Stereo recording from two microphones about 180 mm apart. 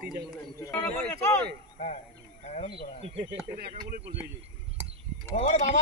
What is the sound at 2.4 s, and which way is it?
Speech, 40° left (ahead or behind).